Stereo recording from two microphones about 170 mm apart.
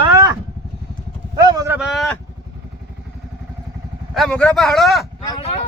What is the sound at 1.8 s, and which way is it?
Speech, centre (ahead or behind).